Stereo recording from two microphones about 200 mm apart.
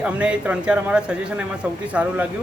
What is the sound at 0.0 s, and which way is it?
A man's voice, 5° right (ahead or behind).